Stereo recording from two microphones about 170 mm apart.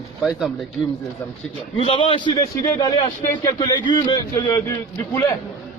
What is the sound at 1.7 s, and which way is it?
A man's voice, 30° left (ahead or behind).